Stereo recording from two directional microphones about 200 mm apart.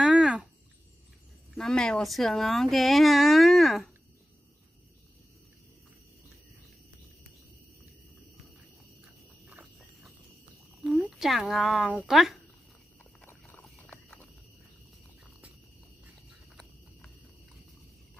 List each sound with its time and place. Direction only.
0.0 s cricket: 5° right (ahead or behind)
1.5 s speech: centre (ahead or behind)
9.5 s a sound: 5° right (ahead or behind)
10.8 s speech: 5° right (ahead or behind)
13.2 s horse: 10° left (ahead or behind)